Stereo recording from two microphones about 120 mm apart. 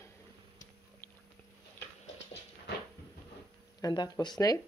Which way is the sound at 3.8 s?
35° left (ahead or behind).